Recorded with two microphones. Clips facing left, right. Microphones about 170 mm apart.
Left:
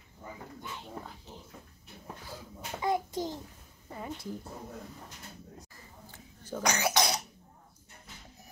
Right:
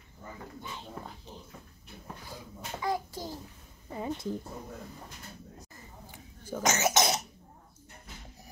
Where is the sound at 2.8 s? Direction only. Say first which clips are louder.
Left 3 dB; 20° left (ahead or behind).